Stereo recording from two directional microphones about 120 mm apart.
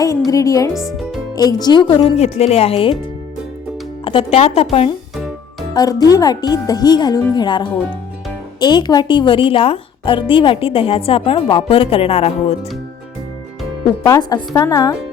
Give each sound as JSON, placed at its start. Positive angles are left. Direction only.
{"t": 0.3, "sound": "speech", "side_deg": 30}
{"t": 0.7, "sound": "speech", "side_deg": 0}
{"t": 1.4, "sound": "speech", "side_deg": 35}
{"t": 2.1, "sound": "speech", "side_deg": 60}
{"t": 4.0, "sound": "a woman's voice", "side_deg": 50}
{"t": 5.7, "sound": "a woman's voice", "side_deg": 30}
{"t": 14.0, "sound": "speech", "side_deg": 35}